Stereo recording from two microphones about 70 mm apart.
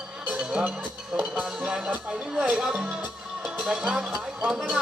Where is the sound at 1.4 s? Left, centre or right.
Centre.